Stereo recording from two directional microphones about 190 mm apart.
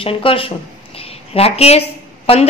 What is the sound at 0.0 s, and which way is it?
A woman's voice, 30° left (ahead or behind).